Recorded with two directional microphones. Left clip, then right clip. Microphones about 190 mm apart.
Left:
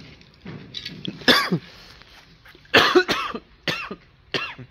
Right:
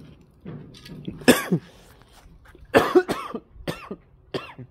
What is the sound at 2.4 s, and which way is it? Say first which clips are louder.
Cough: left 3 dB; 15° right (ahead or behind).